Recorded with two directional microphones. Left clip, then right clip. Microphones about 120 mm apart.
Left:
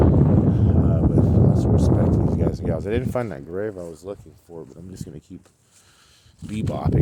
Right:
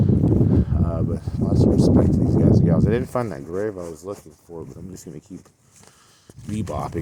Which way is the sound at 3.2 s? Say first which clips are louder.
Right 2 dB; 35° left (ahead or behind).